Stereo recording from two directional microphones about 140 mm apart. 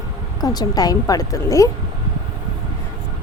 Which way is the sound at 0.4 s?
25° left (ahead or behind).